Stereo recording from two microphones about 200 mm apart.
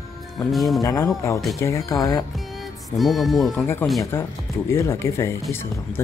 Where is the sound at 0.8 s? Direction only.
15° left (ahead or behind).